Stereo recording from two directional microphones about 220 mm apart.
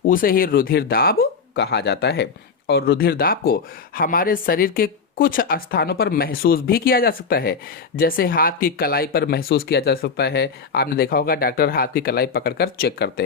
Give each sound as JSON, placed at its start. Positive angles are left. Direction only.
{"t": 0.0, "sound": "speech", "side_deg": 40}